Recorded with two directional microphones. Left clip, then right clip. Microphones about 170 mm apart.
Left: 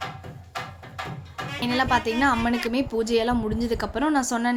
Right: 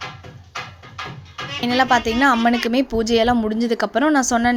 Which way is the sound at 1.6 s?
40° right (ahead or behind).